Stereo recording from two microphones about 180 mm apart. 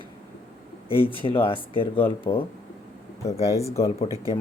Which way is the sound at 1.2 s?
30° left (ahead or behind).